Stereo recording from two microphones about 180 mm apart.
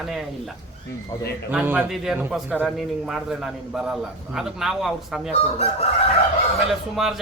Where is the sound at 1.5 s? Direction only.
10° right (ahead or behind).